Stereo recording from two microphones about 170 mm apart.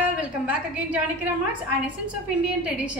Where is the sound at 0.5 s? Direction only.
10° right (ahead or behind).